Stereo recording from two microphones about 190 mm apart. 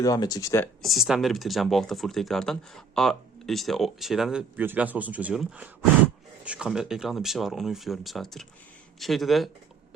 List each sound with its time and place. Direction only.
0.0 s speech: 20° left (ahead or behind)
0.8 s speech: centre (ahead or behind)